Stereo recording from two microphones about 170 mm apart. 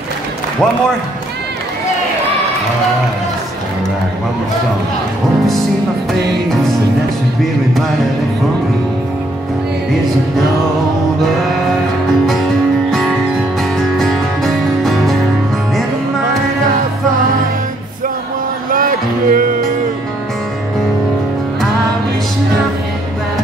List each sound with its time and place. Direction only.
13.7 s music: centre (ahead or behind)
18.7 s music: 55° right (ahead or behind)